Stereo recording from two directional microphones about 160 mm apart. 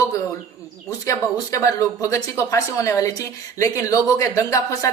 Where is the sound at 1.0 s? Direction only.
20° left (ahead or behind).